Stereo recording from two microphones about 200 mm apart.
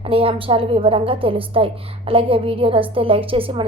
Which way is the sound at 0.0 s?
30° right (ahead or behind).